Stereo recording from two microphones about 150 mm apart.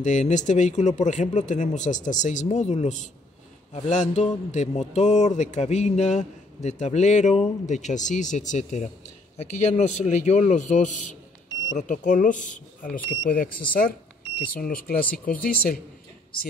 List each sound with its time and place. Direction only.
0.0 s speech: 55° left (ahead or behind); by 15.8 s 75° left (ahead or behind)